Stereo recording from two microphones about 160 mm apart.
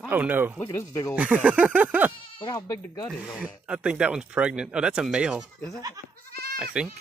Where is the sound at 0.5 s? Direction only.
15° left (ahead or behind).